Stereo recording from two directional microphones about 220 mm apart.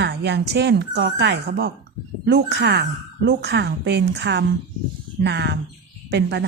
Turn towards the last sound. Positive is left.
turn(degrees=-50)  # may be behind; listen again after turning